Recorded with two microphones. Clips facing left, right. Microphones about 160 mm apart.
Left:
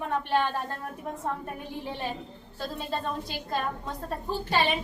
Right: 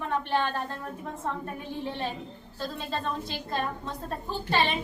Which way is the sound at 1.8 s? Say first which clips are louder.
Right 1 dB; 10° left (ahead or behind).